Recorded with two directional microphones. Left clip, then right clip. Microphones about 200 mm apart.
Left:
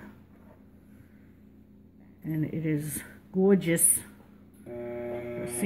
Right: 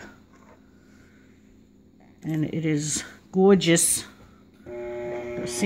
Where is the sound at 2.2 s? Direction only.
55° right (ahead or behind).